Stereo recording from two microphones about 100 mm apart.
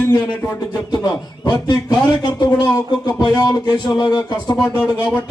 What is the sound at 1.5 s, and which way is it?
A man's voice, 45° left (ahead or behind).